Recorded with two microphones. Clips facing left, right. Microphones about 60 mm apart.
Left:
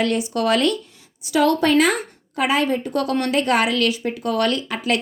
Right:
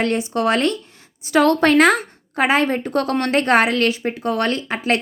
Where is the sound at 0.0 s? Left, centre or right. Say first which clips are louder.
Right 1 dB; right.